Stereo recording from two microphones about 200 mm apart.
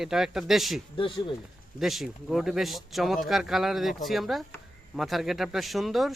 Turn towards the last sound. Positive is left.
turn(degrees=0)  # may be behind; listen again after turning